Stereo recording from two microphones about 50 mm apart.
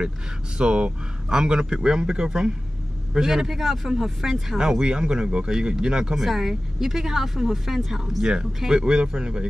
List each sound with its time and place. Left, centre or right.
0.6 s speech: centre